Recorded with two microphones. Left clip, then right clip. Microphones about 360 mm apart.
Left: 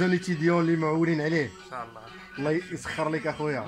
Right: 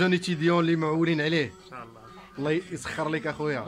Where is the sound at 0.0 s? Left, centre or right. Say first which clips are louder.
Right 1 dB; centre.